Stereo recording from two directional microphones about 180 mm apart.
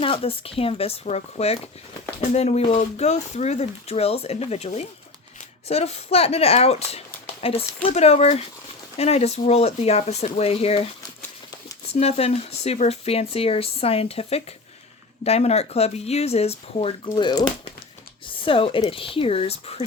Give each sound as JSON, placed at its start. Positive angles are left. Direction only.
{"t": 0.0, "sound": "speech", "side_deg": 30}
{"t": 11.9, "sound": "speech", "side_deg": 35}